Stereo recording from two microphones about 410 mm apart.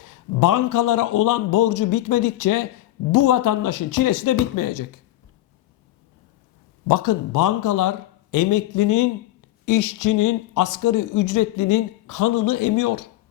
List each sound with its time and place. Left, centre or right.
0.0 s speech: left
6.8 s speech: left